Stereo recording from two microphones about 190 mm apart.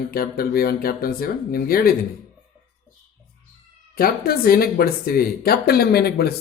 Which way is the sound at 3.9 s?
50° left (ahead or behind).